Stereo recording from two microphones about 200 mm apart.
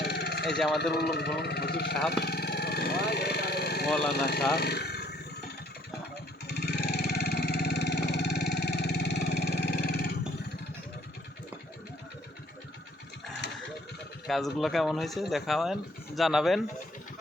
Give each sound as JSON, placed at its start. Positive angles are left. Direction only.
{"t": 0.0, "sound": "vehicle", "side_deg": 55}
{"t": 0.9, "sound": "speech", "side_deg": 55}
{"t": 2.0, "sound": "vehicle", "side_deg": 55}
{"t": 4.1, "sound": "speech", "side_deg": 55}
{"t": 4.5, "sound": "vehicle", "side_deg": 55}
{"t": 6.5, "sound": "vehicle", "side_deg": 55}
{"t": 14.3, "sound": "speech", "side_deg": 0}